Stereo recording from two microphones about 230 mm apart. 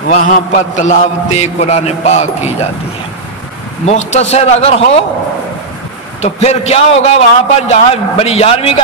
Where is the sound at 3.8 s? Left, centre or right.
Left.